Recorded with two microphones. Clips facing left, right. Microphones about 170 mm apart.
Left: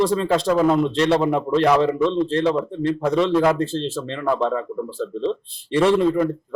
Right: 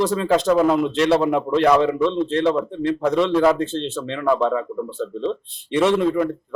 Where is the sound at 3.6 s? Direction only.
35° left (ahead or behind).